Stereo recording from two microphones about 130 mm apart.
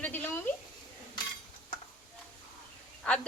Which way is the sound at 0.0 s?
15° left (ahead or behind).